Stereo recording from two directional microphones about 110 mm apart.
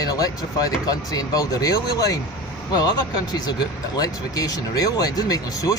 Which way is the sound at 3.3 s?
40° left (ahead or behind).